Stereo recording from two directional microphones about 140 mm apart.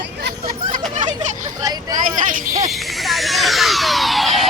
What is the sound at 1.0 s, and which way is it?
Speech, 60° right (ahead or behind).